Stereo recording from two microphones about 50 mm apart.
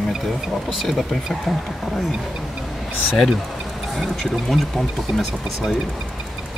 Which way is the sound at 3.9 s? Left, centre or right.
Centre.